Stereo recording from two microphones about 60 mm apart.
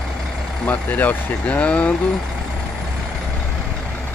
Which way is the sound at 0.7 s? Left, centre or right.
Left.